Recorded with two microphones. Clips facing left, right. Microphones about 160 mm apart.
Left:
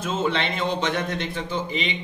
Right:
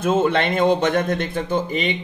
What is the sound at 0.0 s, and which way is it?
Speech, 55° right (ahead or behind).